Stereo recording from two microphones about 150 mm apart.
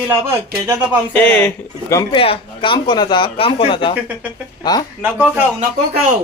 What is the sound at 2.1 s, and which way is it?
Speech, 40° left (ahead or behind).